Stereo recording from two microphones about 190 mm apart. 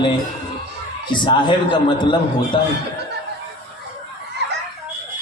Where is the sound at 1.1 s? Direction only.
25° left (ahead or behind).